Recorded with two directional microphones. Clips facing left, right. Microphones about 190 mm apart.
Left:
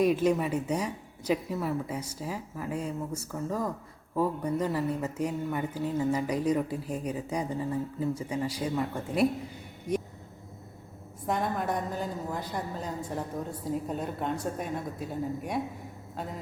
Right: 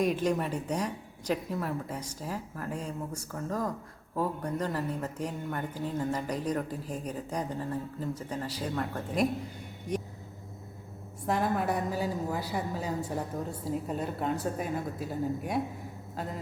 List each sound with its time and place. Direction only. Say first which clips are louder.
0.0 s speech: left 3 dB; 5° left (ahead or behind)
11.3 s a woman's voice: right 1 dB; 5° right (ahead or behind)